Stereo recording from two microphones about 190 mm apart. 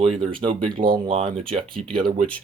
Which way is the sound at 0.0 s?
30° right (ahead or behind).